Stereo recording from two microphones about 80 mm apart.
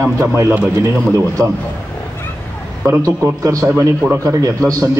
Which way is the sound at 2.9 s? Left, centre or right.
Right.